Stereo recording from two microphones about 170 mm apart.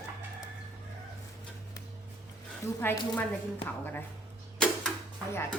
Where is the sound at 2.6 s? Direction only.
15° left (ahead or behind).